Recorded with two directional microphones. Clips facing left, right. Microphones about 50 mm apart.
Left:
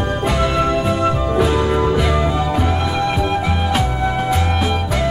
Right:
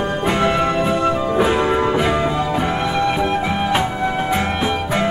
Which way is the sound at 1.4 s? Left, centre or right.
Right.